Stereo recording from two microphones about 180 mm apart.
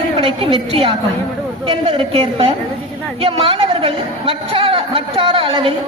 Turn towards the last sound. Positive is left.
turn(degrees=-30)  # may be behind; listen again after turning